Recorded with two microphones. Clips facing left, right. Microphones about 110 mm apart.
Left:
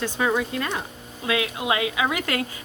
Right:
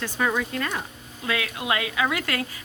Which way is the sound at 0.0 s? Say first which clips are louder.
Left 2 dB; 15° left (ahead or behind).